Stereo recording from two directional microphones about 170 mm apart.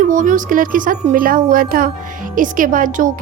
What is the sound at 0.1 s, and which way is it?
Music, 50° right (ahead or behind).